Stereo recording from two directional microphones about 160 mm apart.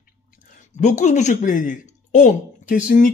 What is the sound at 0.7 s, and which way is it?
Speech, 45° left (ahead or behind).